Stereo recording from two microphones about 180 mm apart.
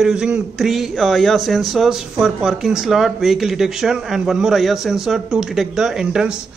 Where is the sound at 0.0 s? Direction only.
5° right (ahead or behind).